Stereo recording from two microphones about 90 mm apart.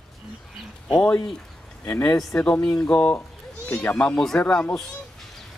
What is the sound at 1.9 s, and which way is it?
Speech, 15° left (ahead or behind).